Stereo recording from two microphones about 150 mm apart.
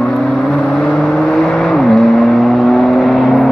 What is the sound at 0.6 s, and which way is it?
Vehicle, centre (ahead or behind).